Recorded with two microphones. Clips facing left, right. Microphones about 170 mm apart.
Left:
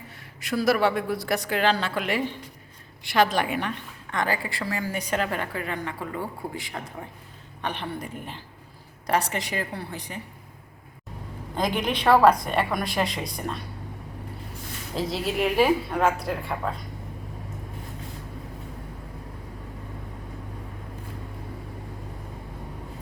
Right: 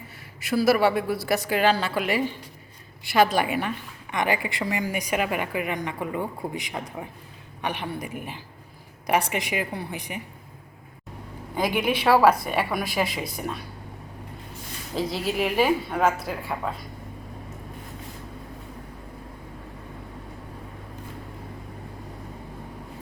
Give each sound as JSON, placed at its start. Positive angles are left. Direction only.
{"t": 0.4, "sound": "a woman's voice", "side_deg": -5}
{"t": 11.5, "sound": "a woman's voice", "side_deg": -10}
{"t": 14.9, "sound": "a woman's voice", "side_deg": 0}